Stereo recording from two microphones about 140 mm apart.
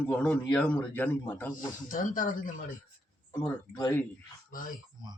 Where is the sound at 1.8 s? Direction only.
75° left (ahead or behind).